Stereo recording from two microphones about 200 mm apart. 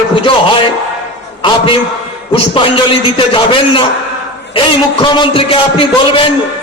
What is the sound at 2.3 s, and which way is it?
A man's voice, 25° left (ahead or behind).